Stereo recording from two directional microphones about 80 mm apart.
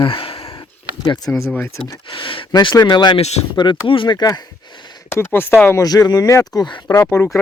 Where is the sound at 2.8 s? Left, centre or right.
Left.